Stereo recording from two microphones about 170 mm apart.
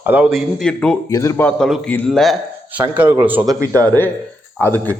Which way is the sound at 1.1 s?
20° left (ahead or behind).